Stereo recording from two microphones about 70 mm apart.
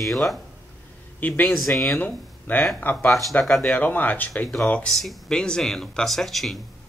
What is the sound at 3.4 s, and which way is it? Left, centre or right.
Speech, centre.